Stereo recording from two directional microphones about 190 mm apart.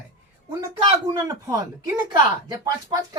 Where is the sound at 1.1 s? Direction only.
15° right (ahead or behind).